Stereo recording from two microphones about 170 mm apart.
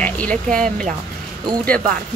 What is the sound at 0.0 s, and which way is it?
Speech, 10° left (ahead or behind).